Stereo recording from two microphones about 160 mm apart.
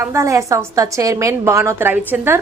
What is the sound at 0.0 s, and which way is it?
A woman's voice, 15° right (ahead or behind).